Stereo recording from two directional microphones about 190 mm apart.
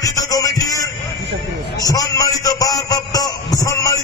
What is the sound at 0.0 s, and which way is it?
Music, 20° left (ahead or behind).